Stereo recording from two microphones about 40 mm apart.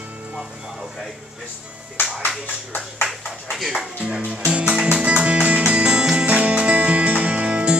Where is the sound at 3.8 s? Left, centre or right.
Centre.